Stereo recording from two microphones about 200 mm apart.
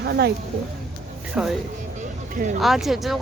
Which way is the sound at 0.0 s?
55° right (ahead or behind).